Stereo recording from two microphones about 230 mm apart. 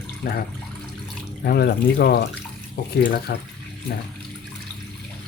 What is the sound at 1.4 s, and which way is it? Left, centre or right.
Speech, left.